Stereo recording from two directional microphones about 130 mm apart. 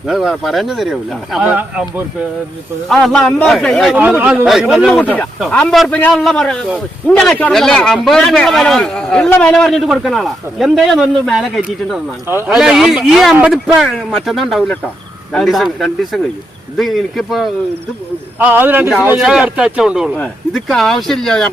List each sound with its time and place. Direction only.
0.1 s a man's voice: centre (ahead or behind)
2.9 s a man's voice: 5° left (ahead or behind)
4.2 s speech: 10° right (ahead or behind)
4.4 s a man's voice: centre (ahead or behind)
4.9 s a man's voice: 10° left (ahead or behind)
12.3 s speech: 15° right (ahead or behind)
12.5 s a man's voice: 5° right (ahead or behind)
18.3 s a man's voice: 15° right (ahead or behind); by 21.5 s 5° left (ahead or behind)